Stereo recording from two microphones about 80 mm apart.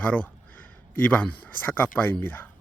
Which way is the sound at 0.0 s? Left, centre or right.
Centre.